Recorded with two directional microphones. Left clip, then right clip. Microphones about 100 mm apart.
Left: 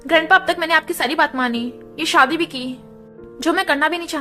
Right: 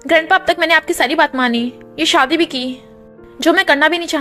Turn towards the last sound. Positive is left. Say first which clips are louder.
# right 6 dB
turn(degrees=-45)  # may be behind; listen again after turning